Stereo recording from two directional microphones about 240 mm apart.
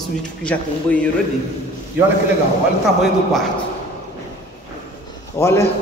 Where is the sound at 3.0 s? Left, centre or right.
Centre.